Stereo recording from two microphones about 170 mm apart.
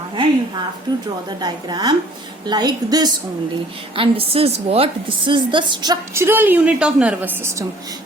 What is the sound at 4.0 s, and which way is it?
A woman's voice, 35° right (ahead or behind).